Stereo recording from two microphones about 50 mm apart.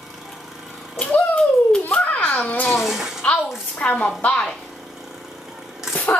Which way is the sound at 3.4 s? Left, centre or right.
Centre.